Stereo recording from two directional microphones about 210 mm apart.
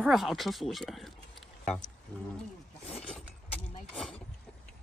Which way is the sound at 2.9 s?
5° left (ahead or behind).